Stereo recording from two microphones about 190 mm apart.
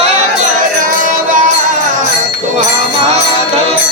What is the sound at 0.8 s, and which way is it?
Music, 45° right (ahead or behind).